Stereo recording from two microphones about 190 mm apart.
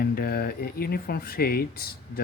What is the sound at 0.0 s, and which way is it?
Speech, 50° left (ahead or behind).